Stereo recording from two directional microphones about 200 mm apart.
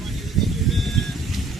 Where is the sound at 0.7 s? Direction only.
Centre (ahead or behind).